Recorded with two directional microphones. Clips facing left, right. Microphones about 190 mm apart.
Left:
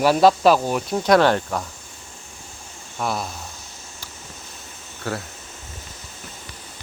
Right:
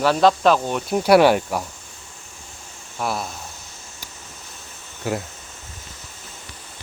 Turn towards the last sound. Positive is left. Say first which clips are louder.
# right 3 dB
turn(degrees=-15)  # may be behind; listen again after turning